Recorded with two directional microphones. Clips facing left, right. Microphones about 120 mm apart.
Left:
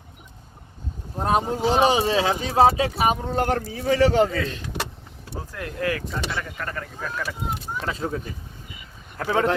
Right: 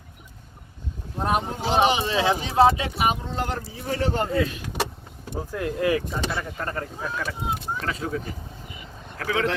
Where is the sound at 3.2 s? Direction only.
50° left (ahead or behind).